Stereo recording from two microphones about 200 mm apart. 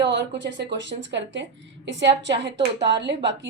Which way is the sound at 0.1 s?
65° right (ahead or behind).